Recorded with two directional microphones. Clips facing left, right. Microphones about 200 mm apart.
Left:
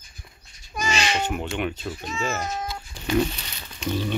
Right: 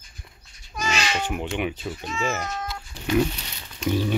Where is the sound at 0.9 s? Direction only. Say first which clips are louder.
Left 2 dB; 25° left (ahead or behind).